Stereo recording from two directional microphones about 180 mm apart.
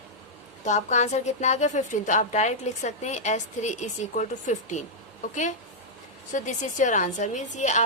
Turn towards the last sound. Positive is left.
turn(degrees=40)  # may be behind; listen again after turning